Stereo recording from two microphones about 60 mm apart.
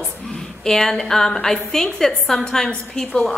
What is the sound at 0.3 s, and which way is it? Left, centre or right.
A woman's voice, centre.